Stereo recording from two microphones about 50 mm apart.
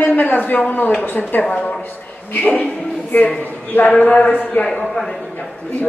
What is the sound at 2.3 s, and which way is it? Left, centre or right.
A woman's voice, left.